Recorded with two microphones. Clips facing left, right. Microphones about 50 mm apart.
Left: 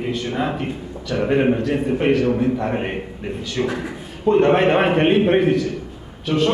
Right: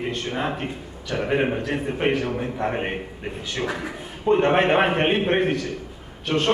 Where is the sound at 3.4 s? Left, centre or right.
Right.